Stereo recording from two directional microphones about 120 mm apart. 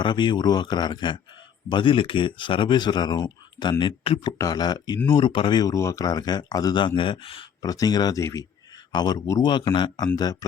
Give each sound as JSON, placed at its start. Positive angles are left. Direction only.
{"t": 0.0, "sound": "speech", "side_deg": 40}
{"t": 4.4, "sound": "speech", "side_deg": 30}
{"t": 7.6, "sound": "speech", "side_deg": 30}
{"t": 9.4, "sound": "speech", "side_deg": 40}